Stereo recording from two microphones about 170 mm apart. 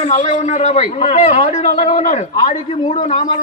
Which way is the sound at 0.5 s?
45° left (ahead or behind).